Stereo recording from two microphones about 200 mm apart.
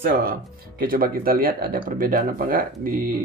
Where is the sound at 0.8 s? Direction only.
50° right (ahead or behind).